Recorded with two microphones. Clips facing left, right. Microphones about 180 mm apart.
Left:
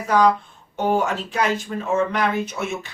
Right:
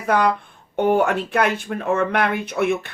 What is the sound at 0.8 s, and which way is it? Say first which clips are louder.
Speech: right 3 dB; 60° right (ahead or behind).